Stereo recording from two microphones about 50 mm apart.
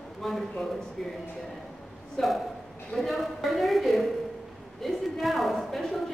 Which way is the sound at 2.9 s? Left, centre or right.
Centre.